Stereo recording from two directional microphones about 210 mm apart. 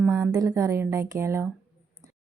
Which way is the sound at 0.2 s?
15° right (ahead or behind).